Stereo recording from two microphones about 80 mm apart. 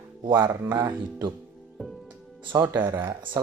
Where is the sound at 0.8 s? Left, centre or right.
Right.